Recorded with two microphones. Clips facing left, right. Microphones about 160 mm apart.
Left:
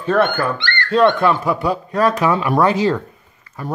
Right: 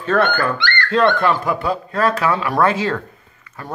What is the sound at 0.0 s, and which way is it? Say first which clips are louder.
Speech: left 1 dB; 10° left (ahead or behind).